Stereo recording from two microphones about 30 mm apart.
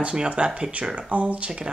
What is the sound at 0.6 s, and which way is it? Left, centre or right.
Speech, right.